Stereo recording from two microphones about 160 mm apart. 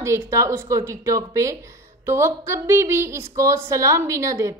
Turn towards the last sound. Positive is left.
turn(degrees=-20)  # may be behind; listen again after turning